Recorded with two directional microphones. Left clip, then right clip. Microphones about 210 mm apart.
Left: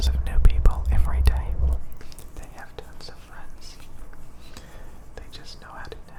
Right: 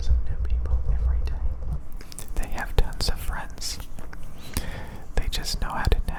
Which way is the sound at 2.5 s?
25° right (ahead or behind).